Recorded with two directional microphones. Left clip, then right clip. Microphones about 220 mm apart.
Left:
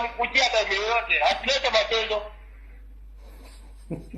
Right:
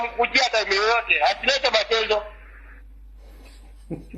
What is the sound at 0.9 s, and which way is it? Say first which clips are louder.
Speech: right 2 dB; 90° right.